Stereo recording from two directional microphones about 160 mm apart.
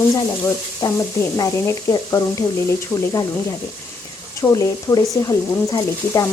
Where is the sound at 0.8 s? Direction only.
25° left (ahead or behind).